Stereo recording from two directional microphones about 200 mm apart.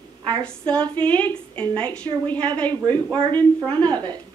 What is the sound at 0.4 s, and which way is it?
A woman's voice, 5° left (ahead or behind).